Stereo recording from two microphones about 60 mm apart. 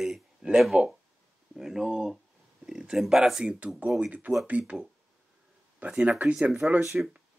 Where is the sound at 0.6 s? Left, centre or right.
Centre.